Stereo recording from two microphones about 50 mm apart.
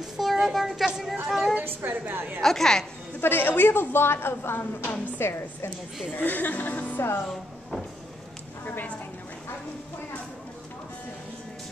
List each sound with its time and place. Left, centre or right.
0.0 s a child's voice: centre
1.6 s a woman's voice: right
2.4 s a woman's voice: centre
3.2 s a woman's voice: left
6.1 s speech: left
7.0 s a woman's voice: left